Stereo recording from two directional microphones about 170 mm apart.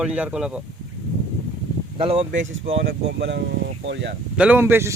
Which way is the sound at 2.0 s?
35° right (ahead or behind).